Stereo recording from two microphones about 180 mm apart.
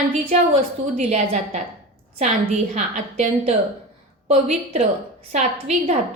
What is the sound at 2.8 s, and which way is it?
A woman's voice, 40° right (ahead or behind).